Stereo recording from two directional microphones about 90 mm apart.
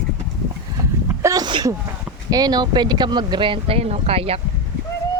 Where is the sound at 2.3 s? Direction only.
45° right (ahead or behind); by 4.3 s 90° right.